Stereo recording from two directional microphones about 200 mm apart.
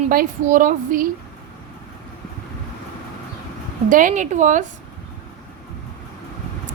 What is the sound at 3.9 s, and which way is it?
Speech, 40° right (ahead or behind).